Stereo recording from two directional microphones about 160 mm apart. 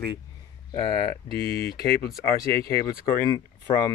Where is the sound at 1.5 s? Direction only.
75° left (ahead or behind).